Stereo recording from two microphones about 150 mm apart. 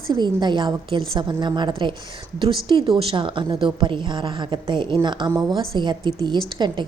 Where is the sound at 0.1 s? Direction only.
30° right (ahead or behind).